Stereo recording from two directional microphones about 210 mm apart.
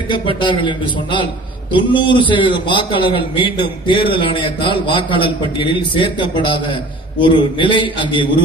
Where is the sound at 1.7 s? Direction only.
20° left (ahead or behind).